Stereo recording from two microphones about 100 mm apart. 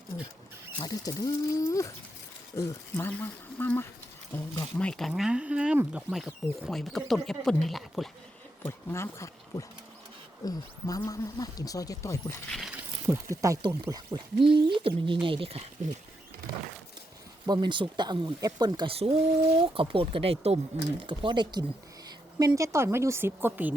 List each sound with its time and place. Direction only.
0.1 s rodents: 30° left (ahead or behind)
0.8 s speech: 35° left (ahead or behind)
3.1 s speech: 20° left (ahead or behind); by 6.0 s 15° right (ahead or behind)
6.1 s speech: 5° right (ahead or behind)
8.6 s speech: 25° left (ahead or behind)
12.5 s speech: centre (ahead or behind)
13.3 s speech: 35° right (ahead or behind)
14.4 s speech: 60° right (ahead or behind); by 15.7 s 85° right
17.4 s speech: 45° right (ahead or behind)
18.3 s speech: 40° right (ahead or behind)
18.9 s speech: 80° right
21.1 s speech: 55° right (ahead or behind)
22.4 s speech: 35° right (ahead or behind); by 23.7 s 20° right (ahead or behind)